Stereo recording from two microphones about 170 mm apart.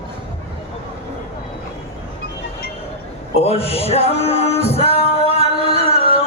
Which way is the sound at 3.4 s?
35° left (ahead or behind).